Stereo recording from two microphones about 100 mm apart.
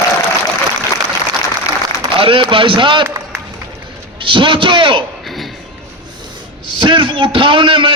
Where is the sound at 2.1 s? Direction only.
60° right (ahead or behind).